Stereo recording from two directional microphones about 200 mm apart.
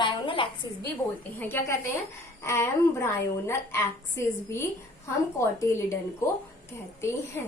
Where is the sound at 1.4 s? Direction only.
10° left (ahead or behind).